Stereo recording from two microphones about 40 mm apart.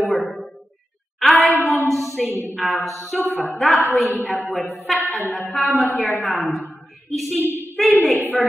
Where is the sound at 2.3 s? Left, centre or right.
Left.